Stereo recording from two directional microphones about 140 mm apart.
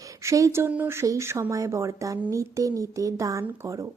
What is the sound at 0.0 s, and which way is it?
A woman's voice, 20° right (ahead or behind).